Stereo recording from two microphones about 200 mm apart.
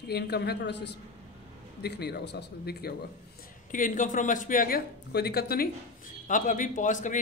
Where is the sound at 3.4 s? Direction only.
40° left (ahead or behind).